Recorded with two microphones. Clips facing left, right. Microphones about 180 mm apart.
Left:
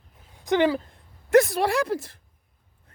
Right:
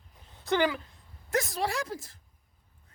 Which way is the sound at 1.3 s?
65° left (ahead or behind).